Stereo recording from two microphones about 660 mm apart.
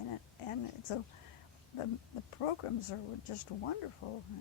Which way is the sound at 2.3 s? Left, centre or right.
Left.